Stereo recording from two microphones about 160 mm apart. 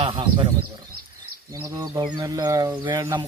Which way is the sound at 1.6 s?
20° right (ahead or behind).